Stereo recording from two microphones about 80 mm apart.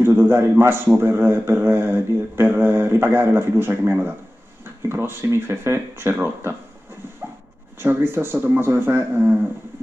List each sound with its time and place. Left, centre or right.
0.0 s a man's voice: right
7.8 s speech: right